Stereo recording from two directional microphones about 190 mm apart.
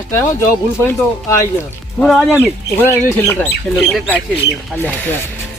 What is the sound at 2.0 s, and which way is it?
Speech, centre (ahead or behind).